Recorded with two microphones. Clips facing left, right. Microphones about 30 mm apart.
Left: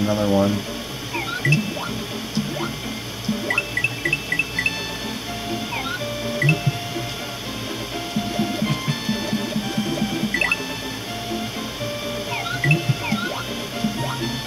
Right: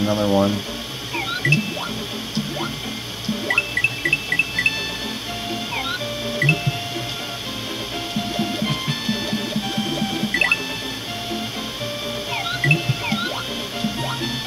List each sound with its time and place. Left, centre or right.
0.1 s speech: centre
3.4 s music: centre
6.3 s music: centre
8.4 s music: right
12.6 s music: centre